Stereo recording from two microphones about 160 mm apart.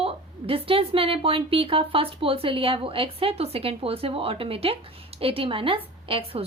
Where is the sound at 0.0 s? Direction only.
35° right (ahead or behind).